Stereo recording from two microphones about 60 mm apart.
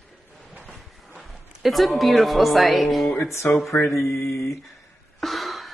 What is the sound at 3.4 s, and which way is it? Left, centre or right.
Speech, left.